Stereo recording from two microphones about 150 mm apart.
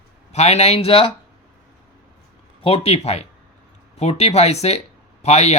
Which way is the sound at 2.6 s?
40° left (ahead or behind).